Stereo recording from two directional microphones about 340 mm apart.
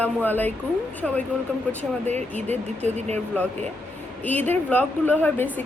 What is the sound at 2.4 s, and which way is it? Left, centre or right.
Speech, centre.